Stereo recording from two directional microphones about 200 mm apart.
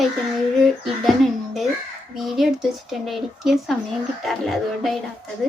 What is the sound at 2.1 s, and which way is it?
A child's voice, centre (ahead or behind).